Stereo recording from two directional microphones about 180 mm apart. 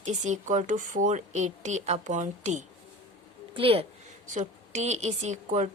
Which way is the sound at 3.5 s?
30° right (ahead or behind).